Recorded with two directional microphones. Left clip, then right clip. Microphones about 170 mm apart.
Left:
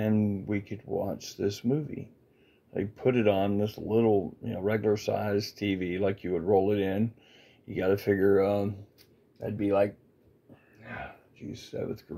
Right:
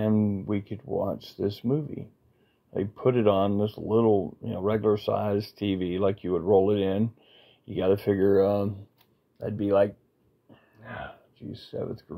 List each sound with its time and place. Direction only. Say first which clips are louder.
0.0 s speech: right 3 dB; 35° right (ahead or behind)